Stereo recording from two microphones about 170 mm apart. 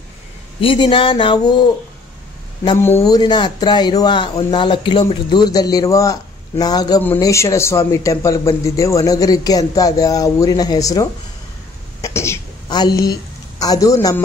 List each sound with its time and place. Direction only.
0.6 s a man's voice: 30° left (ahead or behind)
2.8 s speech: 15° left (ahead or behind)
3.2 s a man's voice: 25° left (ahead or behind)
12.0 s a sound: 15° left (ahead or behind)